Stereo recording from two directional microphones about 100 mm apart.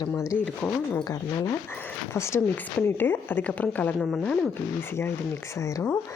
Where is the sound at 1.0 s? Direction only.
35° left (ahead or behind); by 3.9 s 15° left (ahead or behind).